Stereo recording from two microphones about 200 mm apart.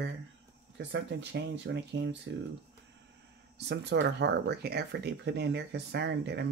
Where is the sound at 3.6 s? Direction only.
60° right (ahead or behind).